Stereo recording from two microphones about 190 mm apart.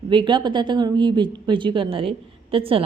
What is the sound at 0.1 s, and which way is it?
A woman's voice, 25° right (ahead or behind).